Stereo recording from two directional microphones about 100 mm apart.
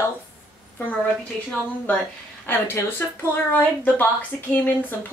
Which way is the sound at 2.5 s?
20° left (ahead or behind).